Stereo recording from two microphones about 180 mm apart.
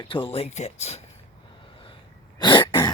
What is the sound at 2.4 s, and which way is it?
Throat clearing, 25° left (ahead or behind).